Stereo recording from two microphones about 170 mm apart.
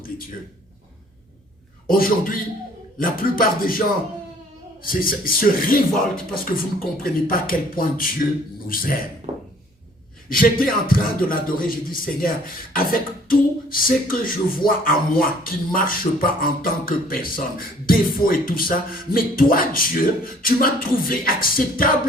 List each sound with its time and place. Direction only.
1.9 s beatboxing: 55° left (ahead or behind)
9.3 s a sound: 40° right (ahead or behind)
10.2 s beatboxing: 55° left (ahead or behind)